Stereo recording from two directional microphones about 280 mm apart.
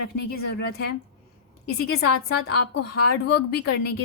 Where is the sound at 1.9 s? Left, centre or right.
Left.